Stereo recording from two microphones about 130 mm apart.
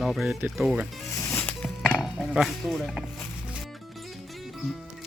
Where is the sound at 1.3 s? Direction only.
15° left (ahead or behind).